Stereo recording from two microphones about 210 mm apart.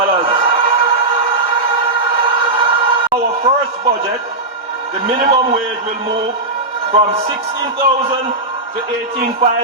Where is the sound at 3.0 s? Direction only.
30° right (ahead or behind).